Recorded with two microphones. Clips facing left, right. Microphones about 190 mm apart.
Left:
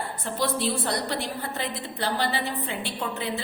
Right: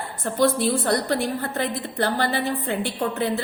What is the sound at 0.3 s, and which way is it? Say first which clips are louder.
A woman's voice: right 7 dB; 50° right (ahead or behind).